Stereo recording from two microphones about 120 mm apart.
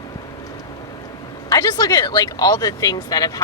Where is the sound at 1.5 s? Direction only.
30° left (ahead or behind).